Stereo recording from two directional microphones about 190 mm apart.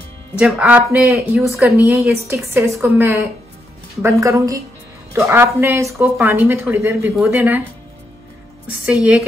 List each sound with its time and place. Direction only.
0.4 s speech: 5° right (ahead or behind)
8.8 s speech: 5° right (ahead or behind)